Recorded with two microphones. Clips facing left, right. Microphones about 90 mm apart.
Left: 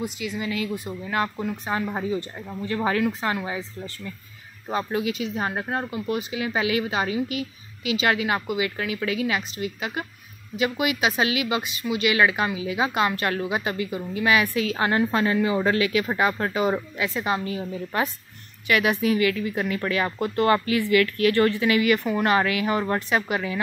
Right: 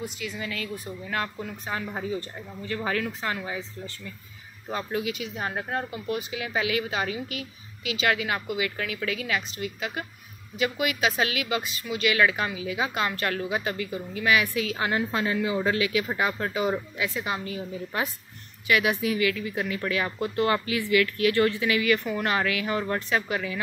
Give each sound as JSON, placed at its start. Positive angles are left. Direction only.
{"t": 0.2, "sound": "speech", "side_deg": 10}
{"t": 1.7, "sound": "speech", "side_deg": 40}
{"t": 4.6, "sound": "speech", "side_deg": 35}
{"t": 15.0, "sound": "speech", "side_deg": 60}